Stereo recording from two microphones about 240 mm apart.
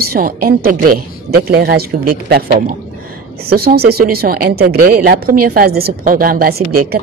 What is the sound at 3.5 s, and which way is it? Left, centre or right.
Speech, right.